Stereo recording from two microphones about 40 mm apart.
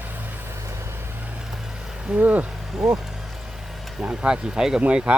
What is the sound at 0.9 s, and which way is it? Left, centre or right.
Vehicle, right.